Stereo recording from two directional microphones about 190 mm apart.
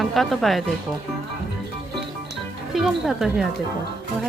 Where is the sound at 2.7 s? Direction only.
Centre (ahead or behind).